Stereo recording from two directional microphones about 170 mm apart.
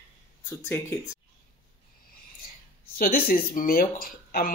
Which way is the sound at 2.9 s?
60° left (ahead or behind).